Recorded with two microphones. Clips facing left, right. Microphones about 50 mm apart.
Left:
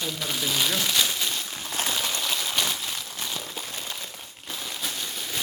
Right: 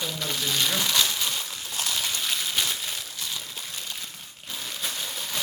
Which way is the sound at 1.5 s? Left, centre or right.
Left.